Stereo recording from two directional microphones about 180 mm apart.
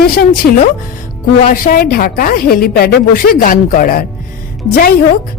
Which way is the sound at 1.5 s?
55° left (ahead or behind).